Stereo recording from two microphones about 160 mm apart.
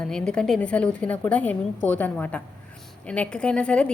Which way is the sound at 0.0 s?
5° left (ahead or behind).